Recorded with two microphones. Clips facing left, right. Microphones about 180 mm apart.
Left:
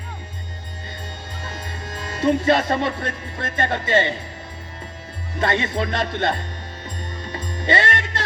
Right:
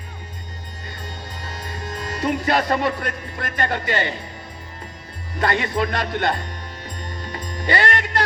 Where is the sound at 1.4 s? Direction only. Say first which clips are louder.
Right 1 dB; 25° left (ahead or behind).